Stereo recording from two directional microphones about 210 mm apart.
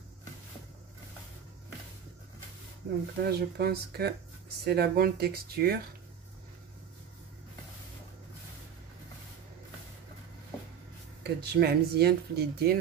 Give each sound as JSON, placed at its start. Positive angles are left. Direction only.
{"t": 3.2, "sound": "speech", "side_deg": -50}
{"t": 11.2, "sound": "speech", "side_deg": -50}